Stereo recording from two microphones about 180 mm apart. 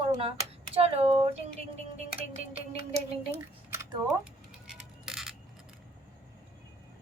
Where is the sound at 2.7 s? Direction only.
35° right (ahead or behind).